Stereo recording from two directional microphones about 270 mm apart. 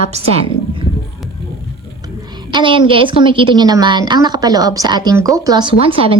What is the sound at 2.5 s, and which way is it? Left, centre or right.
A woman's voice, centre.